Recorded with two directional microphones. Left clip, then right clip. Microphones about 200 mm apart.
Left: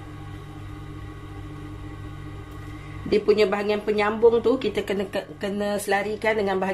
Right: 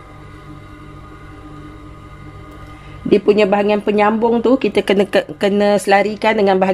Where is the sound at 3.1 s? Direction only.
40° right (ahead or behind).